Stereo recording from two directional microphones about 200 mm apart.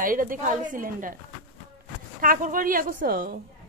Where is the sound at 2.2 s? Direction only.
45° right (ahead or behind).